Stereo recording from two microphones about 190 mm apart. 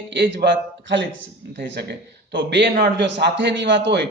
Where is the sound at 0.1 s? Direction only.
65° right (ahead or behind).